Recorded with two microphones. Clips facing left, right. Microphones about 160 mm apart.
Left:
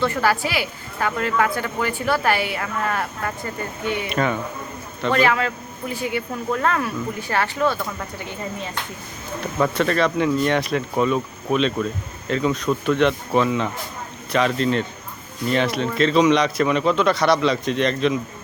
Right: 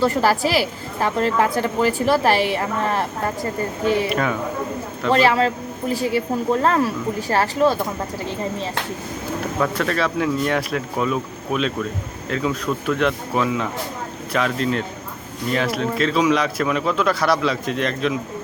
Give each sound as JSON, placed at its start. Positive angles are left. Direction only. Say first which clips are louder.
{"t": 0.0, "sound": "a woman's voice", "louder": "right 3 dB", "side_deg": -35}
{"t": 4.1, "sound": "a man's voice", "louder": "even", "side_deg": 0}
{"t": 5.1, "sound": "a woman's voice", "louder": "right 3 dB", "side_deg": -30}
{"t": 9.6, "sound": "a man's voice", "louder": "left 3 dB", "side_deg": 0}